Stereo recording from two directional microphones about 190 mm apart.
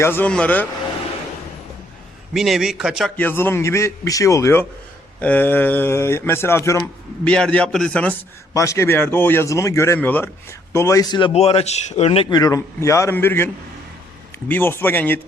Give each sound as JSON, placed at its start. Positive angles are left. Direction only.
{"t": 0.0, "sound": "a man's voice", "side_deg": 10}
{"t": 2.3, "sound": "a man's voice", "side_deg": 0}
{"t": 3.2, "sound": "a man's voice", "side_deg": 10}
{"t": 8.5, "sound": "a man's voice", "side_deg": 15}
{"t": 11.3, "sound": "speech", "side_deg": 35}
{"t": 12.4, "sound": "a man's voice", "side_deg": 15}